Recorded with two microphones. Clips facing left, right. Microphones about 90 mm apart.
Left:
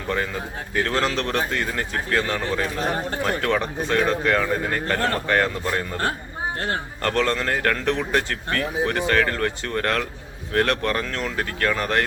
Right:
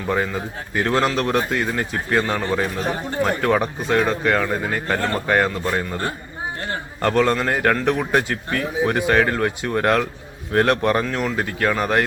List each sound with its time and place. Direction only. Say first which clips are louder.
0.9 s a man's voice: right 5 dB; 10° right (ahead or behind)